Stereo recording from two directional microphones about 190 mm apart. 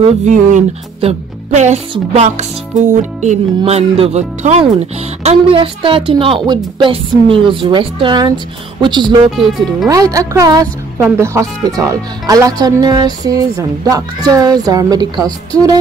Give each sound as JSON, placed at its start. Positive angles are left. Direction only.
{"t": 0.0, "sound": "speech", "side_deg": -40}